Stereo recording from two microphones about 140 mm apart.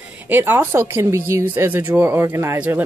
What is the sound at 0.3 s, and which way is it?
Speech, 15° right (ahead or behind).